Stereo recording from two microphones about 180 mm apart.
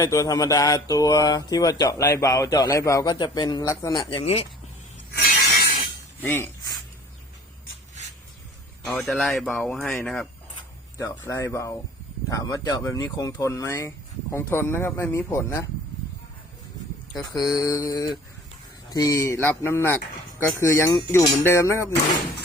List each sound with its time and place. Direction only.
0.0 s speech: 20° left (ahead or behind)
6.2 s speech: 15° left (ahead or behind)
8.8 s speech: centre (ahead or behind)
17.2 s speech: 20° left (ahead or behind)